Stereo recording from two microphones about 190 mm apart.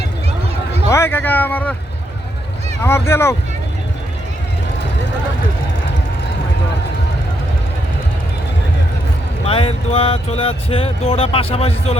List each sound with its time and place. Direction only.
0.9 s speech: 15° left (ahead or behind)
2.8 s speech: 15° left (ahead or behind)
9.5 s speech: 30° left (ahead or behind)